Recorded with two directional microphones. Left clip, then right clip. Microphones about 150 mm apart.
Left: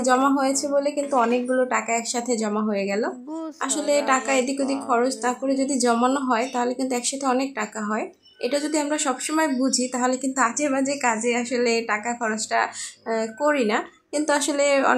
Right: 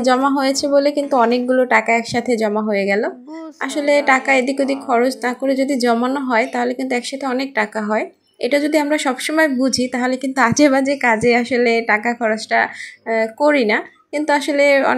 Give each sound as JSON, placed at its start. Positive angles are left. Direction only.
{"t": 0.0, "sound": "a woman's voice", "side_deg": -25}
{"t": 1.1, "sound": "a woman's voice", "side_deg": 0}
{"t": 1.5, "sound": "a woman's voice", "side_deg": -25}
{"t": 10.5, "sound": "a woman's voice", "side_deg": -35}
{"t": 10.8, "sound": "a woman's voice", "side_deg": -20}